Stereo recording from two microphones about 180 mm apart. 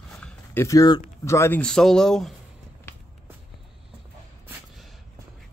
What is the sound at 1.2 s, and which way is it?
A man's voice, 15° left (ahead or behind).